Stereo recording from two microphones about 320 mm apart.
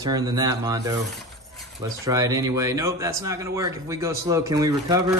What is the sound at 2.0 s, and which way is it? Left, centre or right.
Speech, centre.